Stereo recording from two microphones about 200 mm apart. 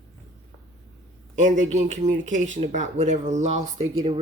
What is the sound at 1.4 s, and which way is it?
Speech, 40° right (ahead or behind).